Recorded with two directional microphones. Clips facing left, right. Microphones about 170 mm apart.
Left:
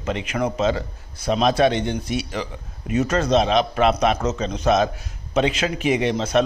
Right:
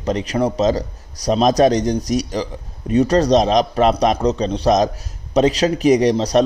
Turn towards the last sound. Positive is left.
turn(degrees=-35)  # may be behind; listen again after turning